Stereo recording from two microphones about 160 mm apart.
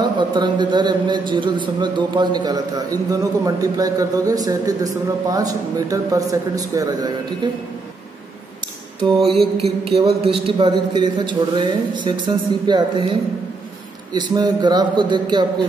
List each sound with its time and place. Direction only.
0.0 s a man's voice: 30° right (ahead or behind)
9.6 s music: 40° right (ahead or behind)
10.2 s a man's voice: 35° right (ahead or behind)
14.1 s a man's voice: 25° right (ahead or behind)